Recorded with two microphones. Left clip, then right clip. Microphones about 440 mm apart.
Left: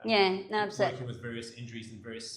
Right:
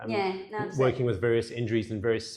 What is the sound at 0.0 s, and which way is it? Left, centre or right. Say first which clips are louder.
Speech: left 3 dB; left.